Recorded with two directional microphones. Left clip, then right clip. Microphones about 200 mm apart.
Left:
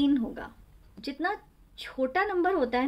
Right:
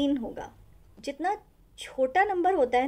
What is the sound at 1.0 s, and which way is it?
Speech, centre (ahead or behind).